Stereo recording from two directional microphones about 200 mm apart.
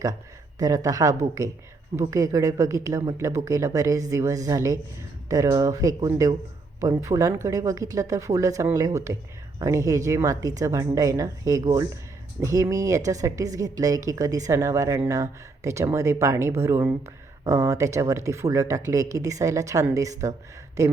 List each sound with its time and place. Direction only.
0.6 s a woman's voice: 15° right (ahead or behind)